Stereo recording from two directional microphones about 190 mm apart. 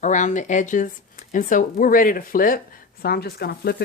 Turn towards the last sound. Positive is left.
turn(degrees=55)  # may be behind; listen again after turning